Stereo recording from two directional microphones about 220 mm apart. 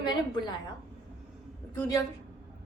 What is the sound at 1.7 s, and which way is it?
Speech, 15° left (ahead or behind).